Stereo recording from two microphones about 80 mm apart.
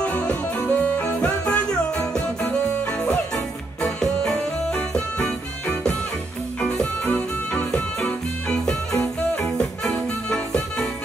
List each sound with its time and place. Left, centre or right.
0.0 s music: centre
3.8 s music: centre